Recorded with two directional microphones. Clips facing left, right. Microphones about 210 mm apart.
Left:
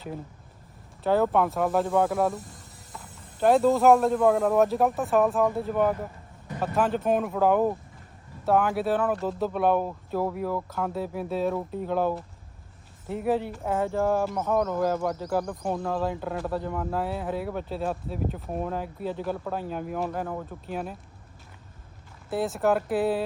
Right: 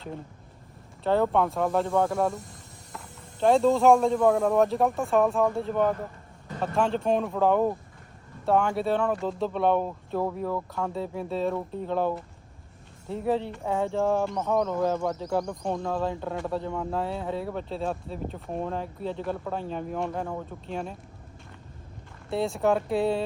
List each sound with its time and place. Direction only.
1.0 s speech: 5° left (ahead or behind)
13.2 s speech: 5° left (ahead or behind)
22.3 s speech: centre (ahead or behind)